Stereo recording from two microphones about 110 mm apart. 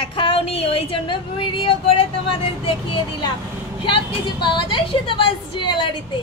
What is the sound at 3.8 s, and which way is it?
Speech, 50° left (ahead or behind).